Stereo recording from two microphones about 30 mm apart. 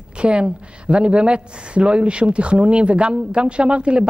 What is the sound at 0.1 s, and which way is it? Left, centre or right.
Speech, right.